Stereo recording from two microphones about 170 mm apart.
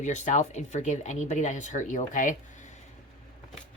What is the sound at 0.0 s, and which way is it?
Speech, 45° left (ahead or behind).